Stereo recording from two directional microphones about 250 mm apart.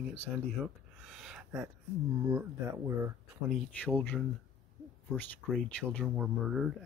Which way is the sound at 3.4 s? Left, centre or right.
Centre.